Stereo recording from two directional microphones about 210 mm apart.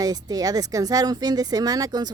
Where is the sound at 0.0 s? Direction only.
20° right (ahead or behind).